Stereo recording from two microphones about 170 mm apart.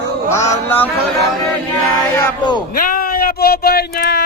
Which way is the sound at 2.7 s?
55° left (ahead or behind).